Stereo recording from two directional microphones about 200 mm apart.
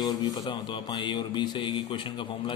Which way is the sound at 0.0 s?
20° left (ahead or behind).